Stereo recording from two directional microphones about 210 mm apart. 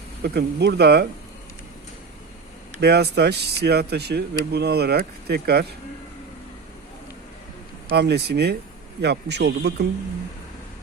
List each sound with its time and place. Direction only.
0.2 s speech: 50° right (ahead or behind)
2.8 s speech: 50° right (ahead or behind)
7.9 s speech: 50° right (ahead or behind)